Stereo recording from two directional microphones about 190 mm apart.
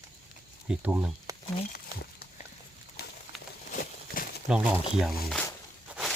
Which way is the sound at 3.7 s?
40° left (ahead or behind).